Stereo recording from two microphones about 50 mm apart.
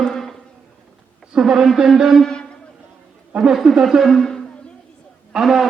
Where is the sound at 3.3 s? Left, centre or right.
Centre.